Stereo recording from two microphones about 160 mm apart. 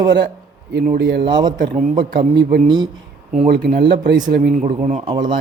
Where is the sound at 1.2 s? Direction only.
30° right (ahead or behind).